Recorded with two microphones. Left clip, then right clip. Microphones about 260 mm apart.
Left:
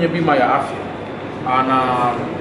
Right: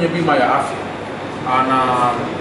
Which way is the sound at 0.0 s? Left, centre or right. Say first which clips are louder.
Even; centre.